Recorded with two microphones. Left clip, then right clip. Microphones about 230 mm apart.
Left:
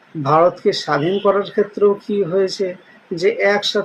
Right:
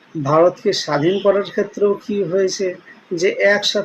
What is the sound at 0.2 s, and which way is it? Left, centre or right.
Speech, centre.